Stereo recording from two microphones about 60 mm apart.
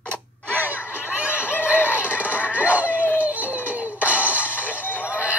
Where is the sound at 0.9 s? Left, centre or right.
Left.